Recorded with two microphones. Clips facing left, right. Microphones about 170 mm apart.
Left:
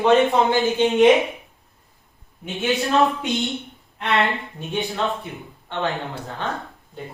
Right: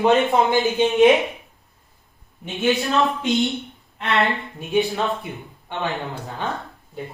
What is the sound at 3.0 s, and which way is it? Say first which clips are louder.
A woman's voice: right 1 dB; centre (ahead or behind).